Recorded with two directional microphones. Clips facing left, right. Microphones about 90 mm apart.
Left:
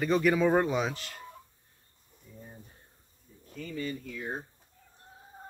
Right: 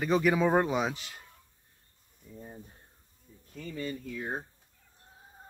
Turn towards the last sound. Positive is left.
turn(degrees=-25)  # may be behind; listen again after turning